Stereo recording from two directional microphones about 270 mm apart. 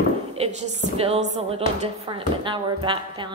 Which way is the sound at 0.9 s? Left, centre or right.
Right.